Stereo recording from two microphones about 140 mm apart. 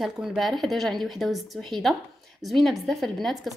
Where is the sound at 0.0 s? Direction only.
5° right (ahead or behind).